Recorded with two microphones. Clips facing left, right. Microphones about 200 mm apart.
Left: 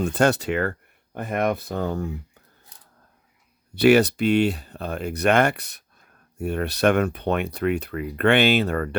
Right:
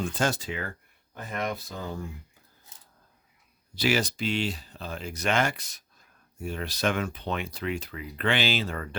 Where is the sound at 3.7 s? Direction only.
60° left (ahead or behind).